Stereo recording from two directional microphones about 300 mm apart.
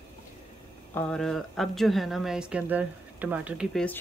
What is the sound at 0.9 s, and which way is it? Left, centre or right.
Speech, centre.